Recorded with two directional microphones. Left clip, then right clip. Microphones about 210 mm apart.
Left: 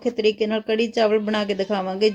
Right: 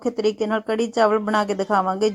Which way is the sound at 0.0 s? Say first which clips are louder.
Left 1 dB; 15° right (ahead or behind).